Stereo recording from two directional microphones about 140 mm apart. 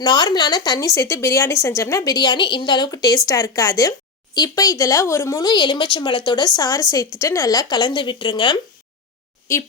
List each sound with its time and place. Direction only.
0.0 s a woman's voice: 30° left (ahead or behind)
9.5 s a woman's voice: 20° left (ahead or behind)